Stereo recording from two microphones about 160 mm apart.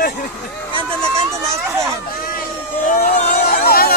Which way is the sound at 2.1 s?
65° left (ahead or behind).